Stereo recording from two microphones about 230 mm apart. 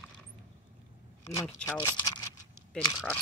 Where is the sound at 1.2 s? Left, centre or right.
Centre.